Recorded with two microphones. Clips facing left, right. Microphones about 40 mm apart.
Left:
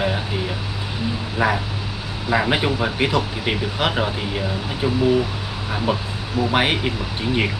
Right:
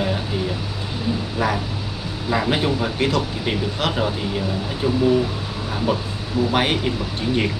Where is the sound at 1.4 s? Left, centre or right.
Centre.